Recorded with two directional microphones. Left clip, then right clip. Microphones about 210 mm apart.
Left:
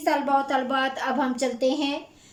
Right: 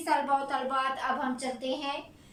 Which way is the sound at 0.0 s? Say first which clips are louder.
Left 5 dB; 40° left (ahead or behind).